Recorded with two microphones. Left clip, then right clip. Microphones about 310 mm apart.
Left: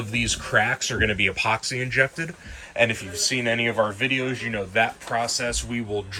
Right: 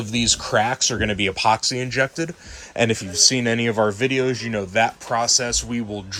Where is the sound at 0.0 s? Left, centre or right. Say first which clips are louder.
Right 4 dB; centre.